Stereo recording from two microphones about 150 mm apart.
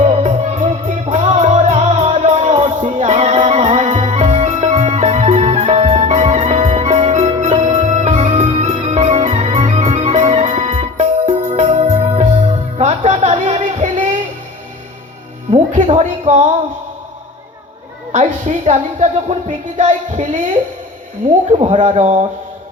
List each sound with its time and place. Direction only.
0.0 s music: 45° right (ahead or behind)
6.1 s music: 50° right (ahead or behind)
12.8 s a sound: 45° right (ahead or behind)
15.7 s a sound: 50° right (ahead or behind)
18.1 s speech: 45° right (ahead or behind)
21.5 s speech: 35° right (ahead or behind)
21.8 s speech: 50° right (ahead or behind)